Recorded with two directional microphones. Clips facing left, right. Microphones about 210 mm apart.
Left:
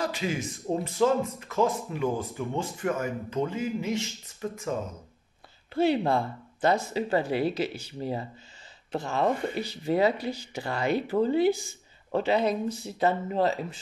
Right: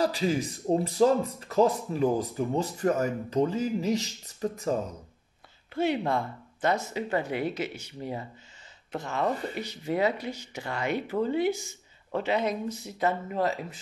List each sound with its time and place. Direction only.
0.0 s speech: 35° right (ahead or behind)
5.8 s speech: 30° left (ahead or behind)